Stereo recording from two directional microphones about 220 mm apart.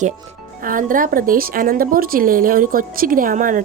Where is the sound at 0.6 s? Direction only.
40° right (ahead or behind).